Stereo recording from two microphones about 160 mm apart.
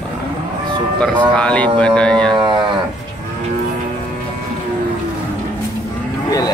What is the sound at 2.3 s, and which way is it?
Livestock, 30° right (ahead or behind).